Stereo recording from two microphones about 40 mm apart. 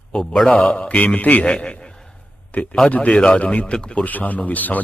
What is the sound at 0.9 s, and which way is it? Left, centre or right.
Speech, left.